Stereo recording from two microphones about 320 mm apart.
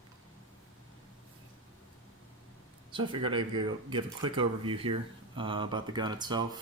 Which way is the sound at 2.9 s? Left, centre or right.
Centre.